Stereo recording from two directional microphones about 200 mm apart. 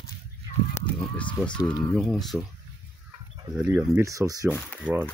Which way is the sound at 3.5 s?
10° right (ahead or behind).